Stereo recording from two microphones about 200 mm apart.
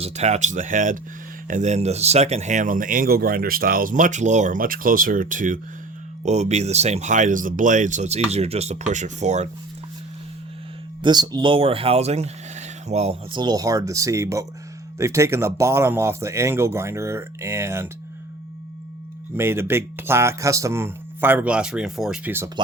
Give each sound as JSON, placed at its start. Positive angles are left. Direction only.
{"t": 0.0, "sound": "speech", "side_deg": -35}
{"t": 11.0, "sound": "speech", "side_deg": -20}
{"t": 19.4, "sound": "speech", "side_deg": -10}